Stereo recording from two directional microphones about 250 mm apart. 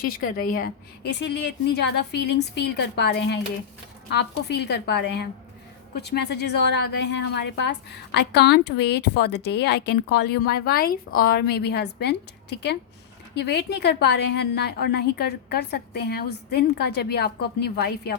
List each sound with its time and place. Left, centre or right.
0.2 s a woman's voice: left